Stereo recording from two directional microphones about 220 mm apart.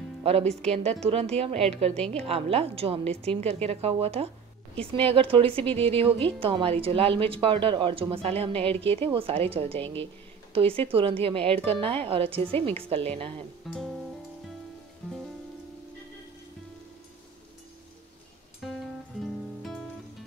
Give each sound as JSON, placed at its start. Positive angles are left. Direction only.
{"t": 0.2, "sound": "speech", "side_deg": -30}
{"t": 13.7, "sound": "speech", "side_deg": 0}
{"t": 18.6, "sound": "music", "side_deg": 0}